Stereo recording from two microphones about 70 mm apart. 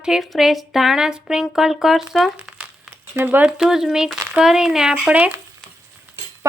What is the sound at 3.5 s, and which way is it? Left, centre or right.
Speech, centre.